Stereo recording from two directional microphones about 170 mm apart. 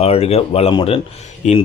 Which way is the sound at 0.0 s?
35° left (ahead or behind).